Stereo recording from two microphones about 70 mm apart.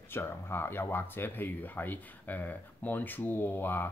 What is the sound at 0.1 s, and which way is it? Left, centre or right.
Speech, left.